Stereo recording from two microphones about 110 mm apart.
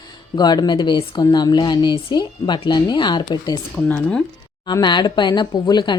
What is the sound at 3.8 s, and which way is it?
Speech, 10° left (ahead or behind).